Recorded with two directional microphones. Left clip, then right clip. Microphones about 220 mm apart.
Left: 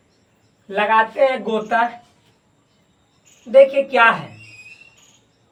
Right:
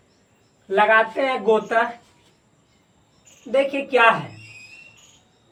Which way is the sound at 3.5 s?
20° right (ahead or behind).